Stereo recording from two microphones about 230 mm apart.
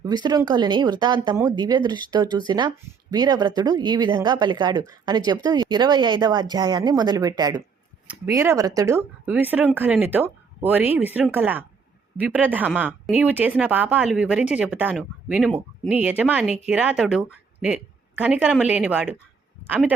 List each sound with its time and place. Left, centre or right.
0.0 s speech: centre